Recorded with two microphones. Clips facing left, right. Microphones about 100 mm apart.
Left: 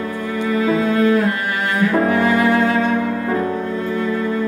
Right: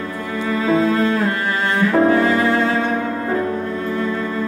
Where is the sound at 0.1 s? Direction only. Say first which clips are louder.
Left 1 dB; 35° right (ahead or behind).